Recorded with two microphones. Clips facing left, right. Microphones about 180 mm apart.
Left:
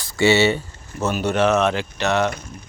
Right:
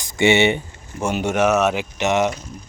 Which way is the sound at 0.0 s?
20° right (ahead or behind).